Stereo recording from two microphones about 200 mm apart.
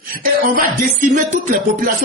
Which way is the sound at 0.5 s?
40° right (ahead or behind).